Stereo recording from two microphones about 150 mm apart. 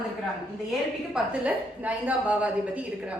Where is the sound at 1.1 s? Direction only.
10° right (ahead or behind).